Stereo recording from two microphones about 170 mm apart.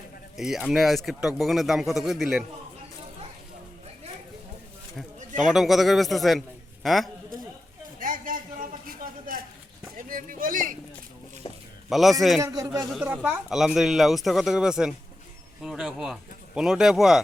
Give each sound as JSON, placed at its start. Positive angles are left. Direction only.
{"t": 0.3, "sound": "speech", "side_deg": 0}
{"t": 5.5, "sound": "speech", "side_deg": 0}
{"t": 7.9, "sound": "a sound", "side_deg": -50}
{"t": 10.1, "sound": "speech", "side_deg": -55}
{"t": 11.4, "sound": "a sound", "side_deg": 35}
{"t": 11.9, "sound": "a man's voice", "side_deg": 0}
{"t": 12.4, "sound": "speech", "side_deg": -20}
{"t": 12.9, "sound": "speech", "side_deg": -10}